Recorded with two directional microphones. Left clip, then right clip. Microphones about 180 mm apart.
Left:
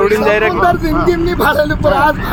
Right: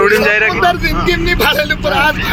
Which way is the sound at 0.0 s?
10° left (ahead or behind).